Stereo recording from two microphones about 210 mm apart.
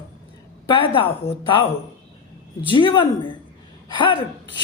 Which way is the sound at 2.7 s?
25° left (ahead or behind).